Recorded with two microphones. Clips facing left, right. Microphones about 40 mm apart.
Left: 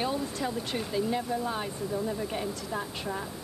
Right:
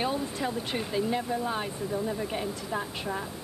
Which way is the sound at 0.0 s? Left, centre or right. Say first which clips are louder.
Right 1 dB; centre.